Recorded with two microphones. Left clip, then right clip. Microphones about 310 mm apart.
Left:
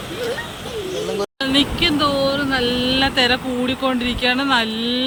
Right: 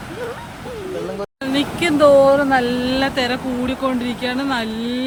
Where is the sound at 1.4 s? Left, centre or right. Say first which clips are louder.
Left 2 dB; centre.